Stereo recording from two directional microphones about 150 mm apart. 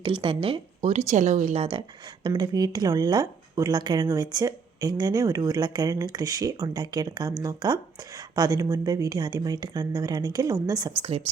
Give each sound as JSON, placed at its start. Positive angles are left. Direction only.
{"t": 0.0, "sound": "speech", "side_deg": -35}
{"t": 2.2, "sound": "speech", "side_deg": -25}